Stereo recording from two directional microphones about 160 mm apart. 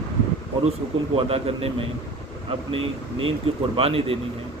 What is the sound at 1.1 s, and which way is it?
Speech, 40° right (ahead or behind).